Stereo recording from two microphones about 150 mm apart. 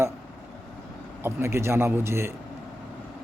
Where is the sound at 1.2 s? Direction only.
15° right (ahead or behind).